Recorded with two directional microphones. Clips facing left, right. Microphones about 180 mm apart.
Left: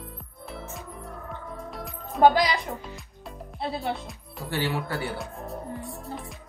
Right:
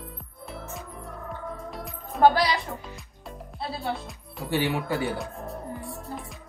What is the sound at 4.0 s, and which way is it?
Speech, centre (ahead or behind).